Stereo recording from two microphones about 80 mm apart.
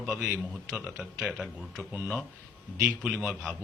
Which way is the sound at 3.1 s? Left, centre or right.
Centre.